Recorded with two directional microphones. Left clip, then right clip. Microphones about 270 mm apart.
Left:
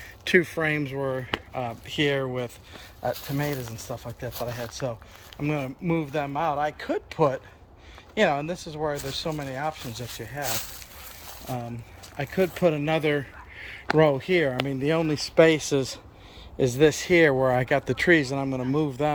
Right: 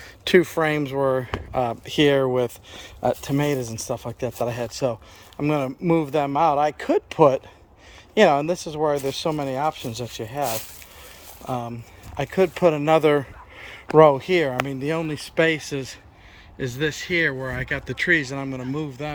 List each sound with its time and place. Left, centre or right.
0.3 s speech: centre; by 3.9 s right
3.9 s speech: right
12.1 s speech: centre